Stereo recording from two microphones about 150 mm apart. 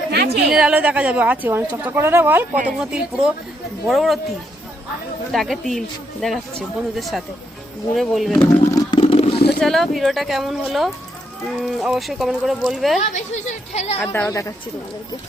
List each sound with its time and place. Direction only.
0.1 s a sound: 90° right
0.5 s speech: 5° right (ahead or behind)
8.7 s a sound: 35° left (ahead or behind)
9.6 s speech: centre (ahead or behind)
13.0 s a woman's voice: 55° left (ahead or behind)
14.0 s a woman's voice: 10° left (ahead or behind)